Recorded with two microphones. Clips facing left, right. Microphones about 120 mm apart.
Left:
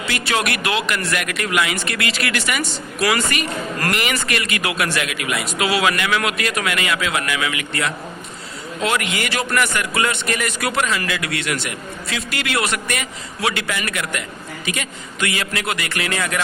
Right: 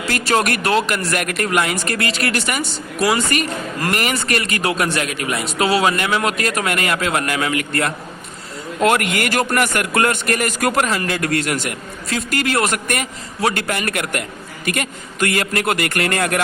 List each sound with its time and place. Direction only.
0.0 s a man's voice: 40° right (ahead or behind)